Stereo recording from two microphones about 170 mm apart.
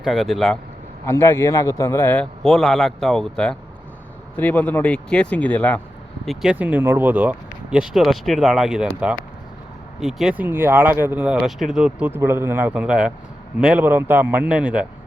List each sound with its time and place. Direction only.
0.0 s speech: centre (ahead or behind)
1.0 s speech: 15° left (ahead or behind)
6.2 s speech: 5° right (ahead or behind)
10.0 s speech: centre (ahead or behind)